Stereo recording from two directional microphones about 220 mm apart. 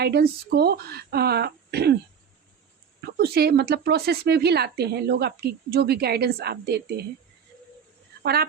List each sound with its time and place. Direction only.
0.0 s speech: 45° right (ahead or behind)
3.2 s speech: 45° right (ahead or behind)
8.2 s speech: 45° right (ahead or behind)